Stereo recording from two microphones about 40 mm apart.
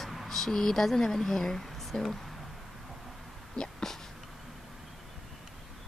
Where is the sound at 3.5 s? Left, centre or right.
Centre.